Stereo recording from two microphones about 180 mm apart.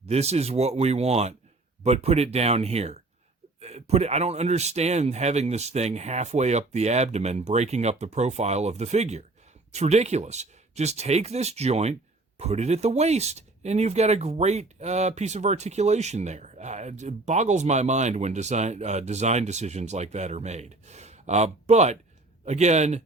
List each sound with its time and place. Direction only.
0.1 s speech: 35° right (ahead or behind)